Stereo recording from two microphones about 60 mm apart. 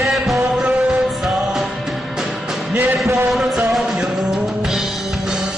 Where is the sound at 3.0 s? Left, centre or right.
Right.